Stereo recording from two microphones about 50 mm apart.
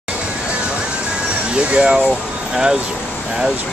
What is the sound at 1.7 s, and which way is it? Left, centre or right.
Speech, right.